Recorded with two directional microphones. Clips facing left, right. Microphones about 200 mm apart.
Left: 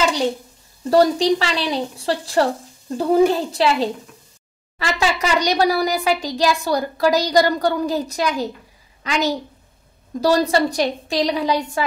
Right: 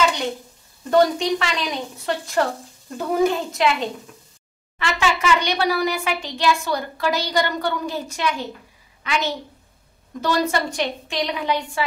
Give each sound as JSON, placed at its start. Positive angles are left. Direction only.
{"t": 0.8, "sound": "a child's voice", "side_deg": 35}